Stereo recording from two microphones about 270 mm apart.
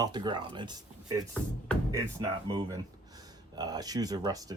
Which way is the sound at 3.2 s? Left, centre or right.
Centre.